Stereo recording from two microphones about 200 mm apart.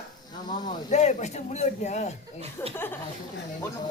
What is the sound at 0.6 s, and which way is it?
Speech, 35° left (ahead or behind).